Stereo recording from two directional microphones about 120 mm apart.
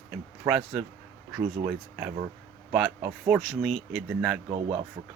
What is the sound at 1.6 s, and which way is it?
Speech, 15° right (ahead or behind).